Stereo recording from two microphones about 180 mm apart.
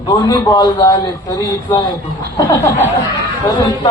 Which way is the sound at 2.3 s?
15° left (ahead or behind).